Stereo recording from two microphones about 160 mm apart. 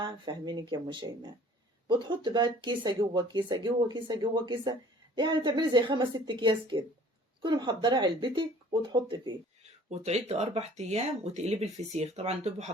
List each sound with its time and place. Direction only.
0.0 s speech: 30° right (ahead or behind)
9.9 s speech: 45° right (ahead or behind)